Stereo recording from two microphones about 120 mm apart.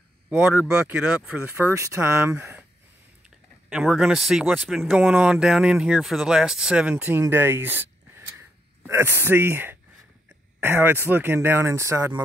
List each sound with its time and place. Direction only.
0.3 s speech: 15° right (ahead or behind)
3.7 s speech: centre (ahead or behind); by 12.1 s 25° right (ahead or behind)